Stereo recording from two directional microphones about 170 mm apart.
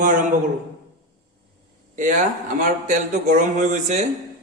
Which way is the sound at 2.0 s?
50° right (ahead or behind).